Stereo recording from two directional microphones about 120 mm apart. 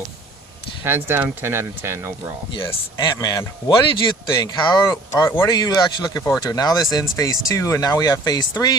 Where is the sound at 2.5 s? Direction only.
40° left (ahead or behind).